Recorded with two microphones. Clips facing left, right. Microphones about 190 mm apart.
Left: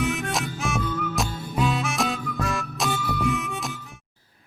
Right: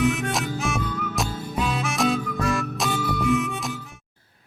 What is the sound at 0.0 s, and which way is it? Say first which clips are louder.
Harmonica: right 3 dB; centre (ahead or behind).